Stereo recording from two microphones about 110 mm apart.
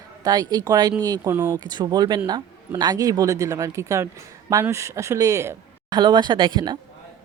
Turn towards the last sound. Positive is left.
turn(degrees=-40)  # may be behind; listen again after turning